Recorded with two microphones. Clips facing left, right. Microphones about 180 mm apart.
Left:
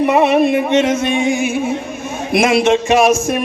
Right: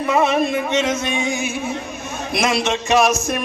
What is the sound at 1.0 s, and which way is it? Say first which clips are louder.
A man's voice: left 7 dB; 55° left (ahead or behind).